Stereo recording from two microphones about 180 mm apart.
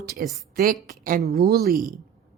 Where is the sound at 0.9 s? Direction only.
55° right (ahead or behind).